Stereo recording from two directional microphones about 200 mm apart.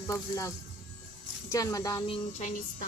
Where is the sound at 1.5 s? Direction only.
15° left (ahead or behind).